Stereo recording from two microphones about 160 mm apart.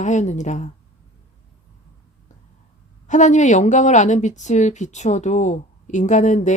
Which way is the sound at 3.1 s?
50° left (ahead or behind).